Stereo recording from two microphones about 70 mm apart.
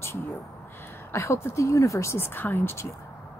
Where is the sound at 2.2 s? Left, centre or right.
Left.